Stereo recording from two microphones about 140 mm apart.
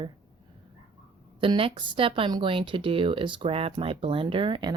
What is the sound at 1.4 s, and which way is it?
Speech, 40° right (ahead or behind).